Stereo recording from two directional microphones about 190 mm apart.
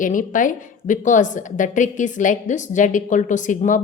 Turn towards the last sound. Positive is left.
turn(degrees=40)  # may be behind; listen again after turning